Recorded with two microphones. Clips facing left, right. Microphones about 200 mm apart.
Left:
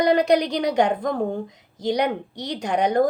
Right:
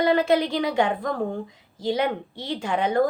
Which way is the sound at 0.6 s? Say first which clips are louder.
Left 2 dB; 40° left (ahead or behind).